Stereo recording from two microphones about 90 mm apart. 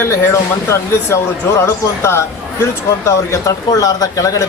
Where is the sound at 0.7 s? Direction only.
30° left (ahead or behind).